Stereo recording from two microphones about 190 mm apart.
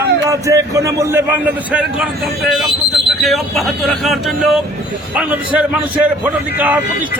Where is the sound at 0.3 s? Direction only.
15° right (ahead or behind).